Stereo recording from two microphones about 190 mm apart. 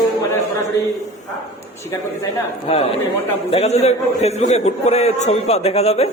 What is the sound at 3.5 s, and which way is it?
A man's voice, 35° left (ahead or behind).